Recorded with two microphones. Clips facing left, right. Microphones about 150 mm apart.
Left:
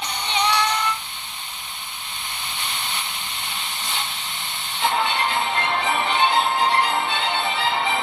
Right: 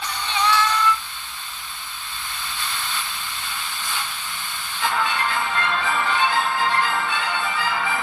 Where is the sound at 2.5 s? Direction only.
20° left (ahead or behind).